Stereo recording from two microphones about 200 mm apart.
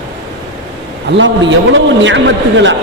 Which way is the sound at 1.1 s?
70° right (ahead or behind).